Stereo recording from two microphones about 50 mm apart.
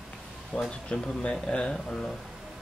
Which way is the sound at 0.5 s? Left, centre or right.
Centre.